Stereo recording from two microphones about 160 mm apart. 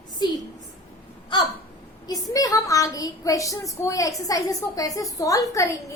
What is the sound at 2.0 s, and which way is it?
A woman's voice, 25° left (ahead or behind).